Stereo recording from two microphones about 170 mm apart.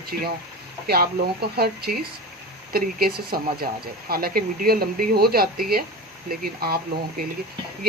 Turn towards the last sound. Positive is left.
turn(degrees=-60)  # may be behind; listen again after turning